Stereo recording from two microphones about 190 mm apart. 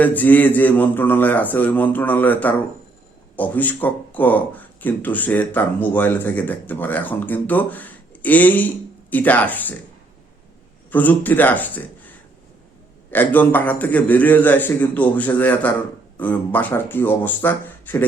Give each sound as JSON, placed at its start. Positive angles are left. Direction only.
{"t": 0.0, "sound": "speech", "side_deg": 10}
{"t": 10.9, "sound": "speech", "side_deg": 10}